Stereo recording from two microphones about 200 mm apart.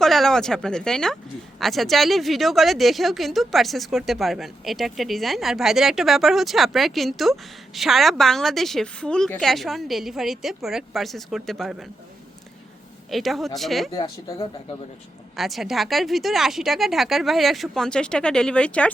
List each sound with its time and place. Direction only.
0.0 s speech: centre (ahead or behind)
13.1 s speech: centre (ahead or behind)
13.9 s speech: 25° left (ahead or behind)
15.4 s speech: centre (ahead or behind)